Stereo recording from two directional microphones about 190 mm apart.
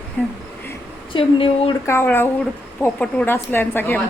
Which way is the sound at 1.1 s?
30° left (ahead or behind).